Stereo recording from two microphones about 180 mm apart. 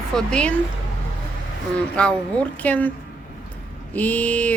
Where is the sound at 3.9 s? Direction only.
10° left (ahead or behind).